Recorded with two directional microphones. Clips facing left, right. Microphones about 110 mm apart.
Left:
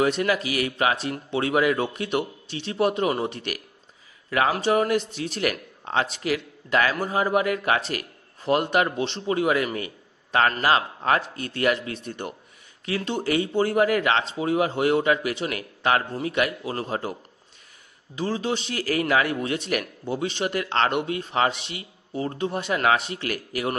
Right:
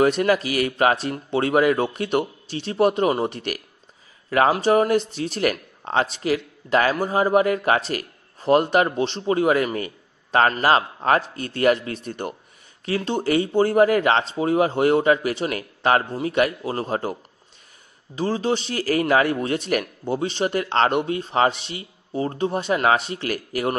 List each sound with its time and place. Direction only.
0.0 s a man's voice: 45° right (ahead or behind)
18.1 s a man's voice: 35° right (ahead or behind)